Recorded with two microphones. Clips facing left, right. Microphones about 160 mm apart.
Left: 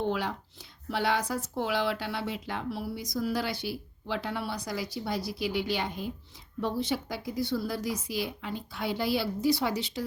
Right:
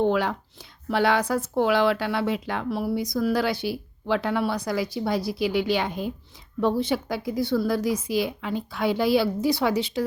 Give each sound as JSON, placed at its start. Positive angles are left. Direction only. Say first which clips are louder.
{"t": 0.0, "sound": "speech", "louder": "right 8 dB", "side_deg": -80}
{"t": 6.6, "sound": "a woman's voice", "louder": "right 7 dB", "side_deg": -70}